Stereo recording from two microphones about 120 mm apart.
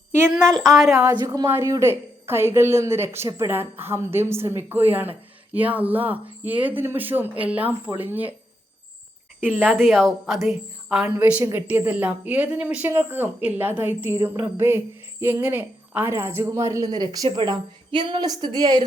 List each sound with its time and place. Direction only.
0.4 s a woman's voice: 5° left (ahead or behind)
1.5 s a woman's voice: 25° right (ahead or behind)
9.4 s speech: 15° right (ahead or behind)
9.8 s a woman's voice: centre (ahead or behind); by 18.9 s 35° right (ahead or behind)